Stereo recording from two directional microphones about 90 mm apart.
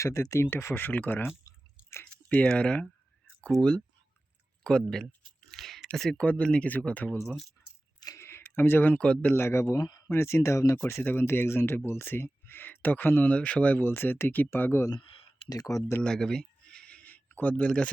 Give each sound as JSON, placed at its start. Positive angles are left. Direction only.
{"t": 0.0, "sound": "speech", "side_deg": 35}
{"t": 2.3, "sound": "speech", "side_deg": 15}
{"t": 5.5, "sound": "a sound", "side_deg": 0}
{"t": 5.9, "sound": "speech", "side_deg": 10}
{"t": 7.2, "sound": "speech", "side_deg": 0}
{"t": 8.0, "sound": "a sound", "side_deg": 30}
{"t": 8.5, "sound": "speech", "side_deg": 25}
{"t": 9.6, "sound": "speech", "side_deg": 45}
{"t": 10.1, "sound": "speech", "side_deg": 25}
{"t": 11.0, "sound": "speech", "side_deg": 25}
{"t": 14.9, "sound": "a sound", "side_deg": 90}
{"t": 15.4, "sound": "speech", "side_deg": 40}
{"t": 16.0, "sound": "a sound", "side_deg": 5}